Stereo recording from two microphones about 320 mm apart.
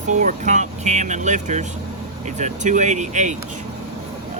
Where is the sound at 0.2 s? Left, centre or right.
Right.